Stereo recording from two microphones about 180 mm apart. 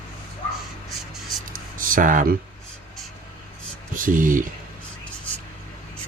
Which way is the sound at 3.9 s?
50° right (ahead or behind).